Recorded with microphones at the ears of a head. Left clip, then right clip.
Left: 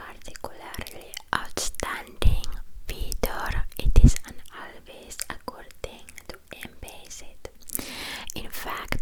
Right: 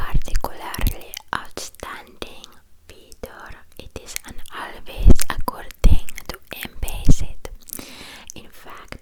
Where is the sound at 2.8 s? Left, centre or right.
Left.